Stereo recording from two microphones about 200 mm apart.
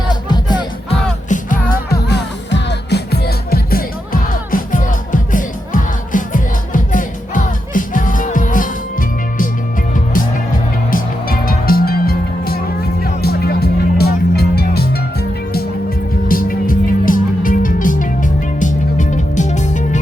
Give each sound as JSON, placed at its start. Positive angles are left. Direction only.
{"t": 0.1, "sound": "music", "side_deg": 20}
{"t": 1.3, "sound": "music", "side_deg": 45}